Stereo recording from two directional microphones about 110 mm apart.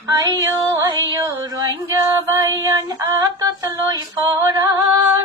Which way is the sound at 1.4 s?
35° right (ahead or behind).